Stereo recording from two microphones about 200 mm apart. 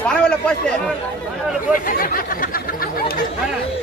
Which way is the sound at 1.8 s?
45° left (ahead or behind).